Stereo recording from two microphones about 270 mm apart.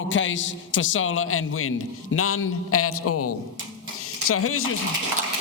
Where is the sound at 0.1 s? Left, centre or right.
Left.